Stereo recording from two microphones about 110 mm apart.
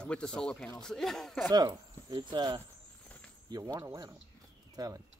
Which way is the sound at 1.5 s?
40° right (ahead or behind).